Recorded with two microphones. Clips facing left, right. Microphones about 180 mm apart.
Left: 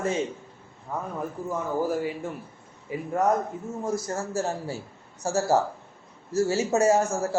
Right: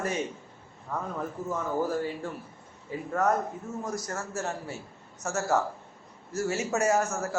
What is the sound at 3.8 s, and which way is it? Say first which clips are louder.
A man's voice: left 6 dB; 30° left (ahead or behind).